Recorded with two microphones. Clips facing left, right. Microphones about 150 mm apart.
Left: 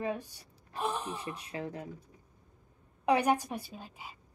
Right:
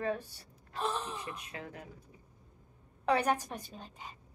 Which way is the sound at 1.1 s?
30° left (ahead or behind).